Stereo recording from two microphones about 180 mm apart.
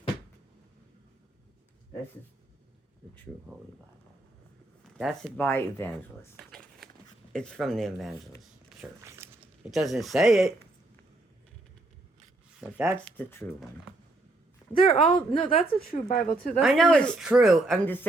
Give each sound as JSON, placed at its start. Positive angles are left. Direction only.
{"t": 4.9, "sound": "speech", "side_deg": 0}
{"t": 5.4, "sound": "speech", "side_deg": 10}
{"t": 6.4, "sound": "a sound", "side_deg": 5}
{"t": 7.3, "sound": "speech", "side_deg": 5}
{"t": 9.0, "sound": "a sound", "side_deg": -15}
{"t": 9.7, "sound": "speech", "side_deg": 0}
{"t": 12.5, "sound": "speech", "side_deg": -10}
{"t": 13.1, "sound": "speech", "side_deg": 10}
{"t": 14.7, "sound": "a woman's voice", "side_deg": 30}
{"t": 15.9, "sound": "speech", "side_deg": 45}
{"t": 16.6, "sound": "speech", "side_deg": 0}